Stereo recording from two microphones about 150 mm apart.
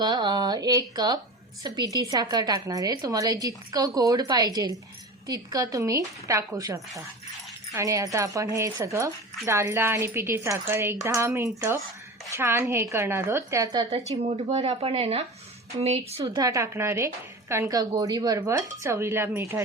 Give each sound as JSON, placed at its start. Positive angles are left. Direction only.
{"t": 0.0, "sound": "a woman's voice", "side_deg": -30}
{"t": 13.7, "sound": "a woman's voice", "side_deg": -40}
{"t": 16.2, "sound": "a woman's voice", "side_deg": -30}